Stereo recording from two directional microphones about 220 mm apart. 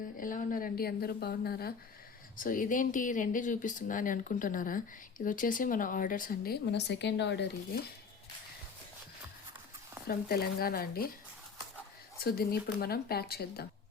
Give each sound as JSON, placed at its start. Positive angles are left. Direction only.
{"t": 0.2, "sound": "a woman's voice", "side_deg": 40}
{"t": 10.1, "sound": "a woman's voice", "side_deg": 45}
{"t": 12.2, "sound": "a woman's voice", "side_deg": 45}